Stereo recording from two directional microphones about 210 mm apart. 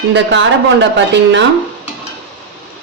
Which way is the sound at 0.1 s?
60° right (ahead or behind).